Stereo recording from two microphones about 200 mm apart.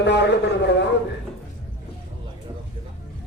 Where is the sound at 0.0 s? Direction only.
60° left (ahead or behind).